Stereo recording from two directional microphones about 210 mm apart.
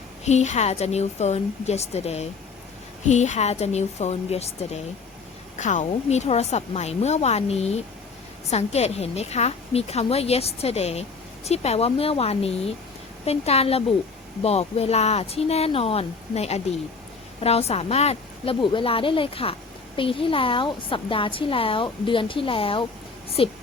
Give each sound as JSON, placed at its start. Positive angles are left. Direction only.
{"t": 0.3, "sound": "a woman's voice", "side_deg": 30}